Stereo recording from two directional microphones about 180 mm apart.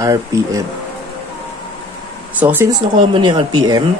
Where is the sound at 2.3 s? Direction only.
10° right (ahead or behind).